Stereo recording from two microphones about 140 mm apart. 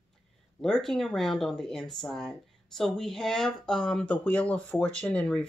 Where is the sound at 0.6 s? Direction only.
5° left (ahead or behind).